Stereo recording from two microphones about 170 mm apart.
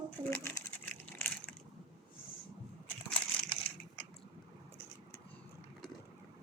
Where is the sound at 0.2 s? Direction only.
20° right (ahead or behind).